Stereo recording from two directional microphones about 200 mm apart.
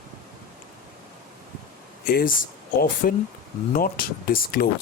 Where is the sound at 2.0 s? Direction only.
50° left (ahead or behind).